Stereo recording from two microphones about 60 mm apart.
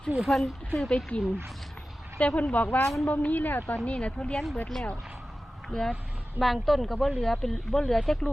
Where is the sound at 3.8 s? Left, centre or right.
Centre.